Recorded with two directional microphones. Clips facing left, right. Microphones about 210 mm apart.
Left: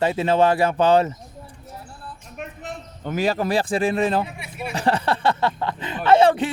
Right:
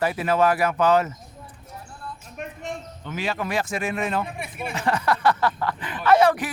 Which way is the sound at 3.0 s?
45° left (ahead or behind).